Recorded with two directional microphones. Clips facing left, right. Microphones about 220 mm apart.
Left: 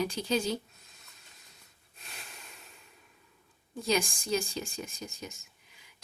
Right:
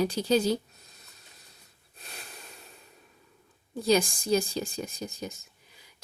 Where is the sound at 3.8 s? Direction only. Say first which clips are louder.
Right 6 dB; 35° right (ahead or behind).